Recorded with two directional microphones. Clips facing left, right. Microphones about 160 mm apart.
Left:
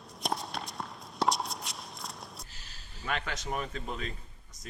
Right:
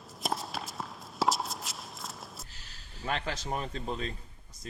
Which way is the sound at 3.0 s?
30° right (ahead or behind).